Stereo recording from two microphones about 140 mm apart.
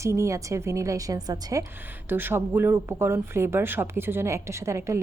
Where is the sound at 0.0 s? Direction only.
20° right (ahead or behind).